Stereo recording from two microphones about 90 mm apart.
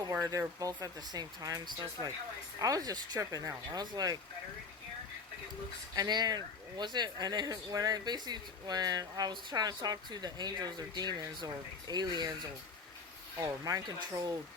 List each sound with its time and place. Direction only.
0.3 s speech: 40° right (ahead or behind); by 2.0 s 55° right (ahead or behind)
2.6 s speech: 40° right (ahead or behind)
6.0 s speech: 50° right (ahead or behind)
13.4 s speech: 40° right (ahead or behind)